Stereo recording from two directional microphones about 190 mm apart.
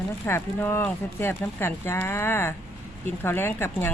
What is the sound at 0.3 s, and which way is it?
Speech, 15° left (ahead or behind).